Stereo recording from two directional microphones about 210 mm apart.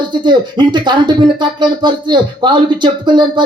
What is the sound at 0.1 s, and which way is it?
Speech, 20° right (ahead or behind).